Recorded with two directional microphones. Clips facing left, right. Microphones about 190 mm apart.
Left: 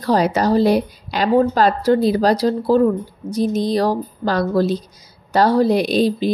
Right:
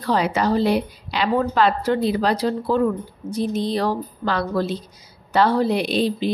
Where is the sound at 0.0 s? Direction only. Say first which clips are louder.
Left 4 dB; 40° left (ahead or behind).